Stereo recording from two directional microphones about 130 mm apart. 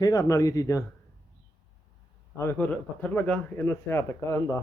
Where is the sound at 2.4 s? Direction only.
15° left (ahead or behind).